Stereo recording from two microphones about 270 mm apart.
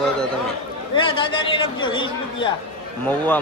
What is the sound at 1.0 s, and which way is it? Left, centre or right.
Speech, centre.